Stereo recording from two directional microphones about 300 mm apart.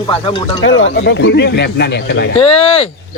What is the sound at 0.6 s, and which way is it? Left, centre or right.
Speech, left.